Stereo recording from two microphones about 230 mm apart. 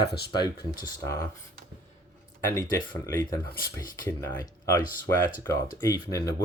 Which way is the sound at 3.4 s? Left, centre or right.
Left.